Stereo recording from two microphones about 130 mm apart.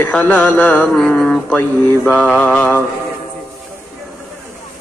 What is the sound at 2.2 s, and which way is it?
Music, 5° left (ahead or behind).